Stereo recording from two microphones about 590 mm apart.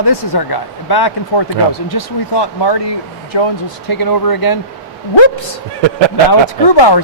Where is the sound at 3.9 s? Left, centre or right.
Left.